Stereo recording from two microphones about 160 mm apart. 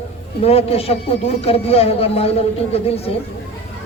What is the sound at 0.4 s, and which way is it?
A man's voice, 40° left (ahead or behind).